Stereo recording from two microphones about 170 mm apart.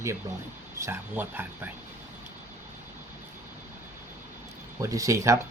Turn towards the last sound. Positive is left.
turn(degrees=-20)  # may be behind; listen again after turning